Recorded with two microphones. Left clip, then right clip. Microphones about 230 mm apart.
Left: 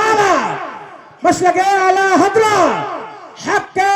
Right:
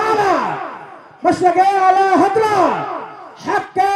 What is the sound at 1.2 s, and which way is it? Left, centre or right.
A man's voice, left.